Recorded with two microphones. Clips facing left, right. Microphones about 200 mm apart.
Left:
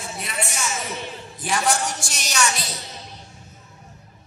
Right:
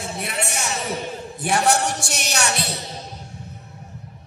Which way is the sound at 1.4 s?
65° right (ahead or behind).